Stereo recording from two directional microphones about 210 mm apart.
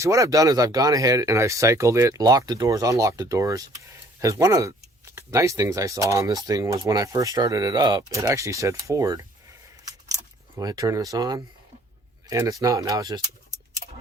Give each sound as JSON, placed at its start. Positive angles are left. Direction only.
{"t": 0.0, "sound": "speech", "side_deg": -15}
{"t": 10.6, "sound": "speech", "side_deg": -15}
{"t": 13.8, "sound": "a sound", "side_deg": -30}